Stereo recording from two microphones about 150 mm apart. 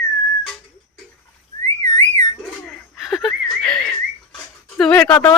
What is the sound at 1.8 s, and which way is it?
Whistling, 50° right (ahead or behind).